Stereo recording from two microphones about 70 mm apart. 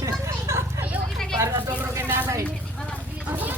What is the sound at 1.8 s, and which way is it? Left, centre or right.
Speech, right.